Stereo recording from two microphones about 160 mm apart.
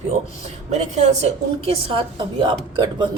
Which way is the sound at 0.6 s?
45° right (ahead or behind).